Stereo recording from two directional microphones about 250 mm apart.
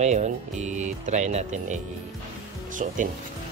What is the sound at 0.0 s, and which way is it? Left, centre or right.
Speech, right.